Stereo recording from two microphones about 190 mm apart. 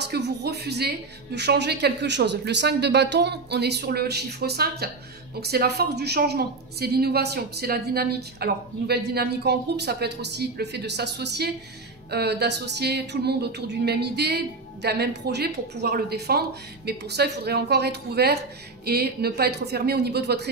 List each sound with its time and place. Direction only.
0.1 s a woman's voice: 60° right (ahead or behind)